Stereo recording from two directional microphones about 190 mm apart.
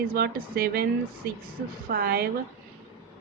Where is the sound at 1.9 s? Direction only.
55° right (ahead or behind).